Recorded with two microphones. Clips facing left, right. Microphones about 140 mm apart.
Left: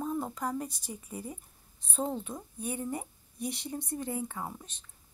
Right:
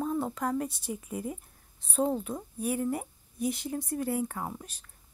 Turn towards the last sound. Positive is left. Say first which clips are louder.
# right 4 dB
turn(degrees=-10)  # may be behind; listen again after turning